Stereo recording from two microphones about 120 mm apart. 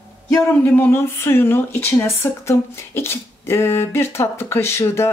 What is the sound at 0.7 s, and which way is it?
Speech, 20° left (ahead or behind).